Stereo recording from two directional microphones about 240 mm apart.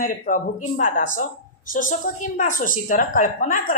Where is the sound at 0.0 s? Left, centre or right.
Left.